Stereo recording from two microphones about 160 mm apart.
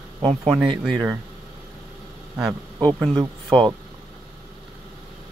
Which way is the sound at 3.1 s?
30° right (ahead or behind).